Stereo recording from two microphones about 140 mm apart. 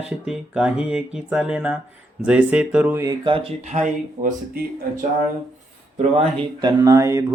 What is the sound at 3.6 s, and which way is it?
Speech, 55° right (ahead or behind).